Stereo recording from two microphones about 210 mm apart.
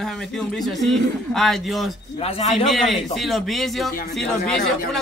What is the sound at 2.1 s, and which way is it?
Speech, 30° left (ahead or behind).